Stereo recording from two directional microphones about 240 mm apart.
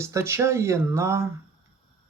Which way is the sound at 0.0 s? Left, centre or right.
Centre.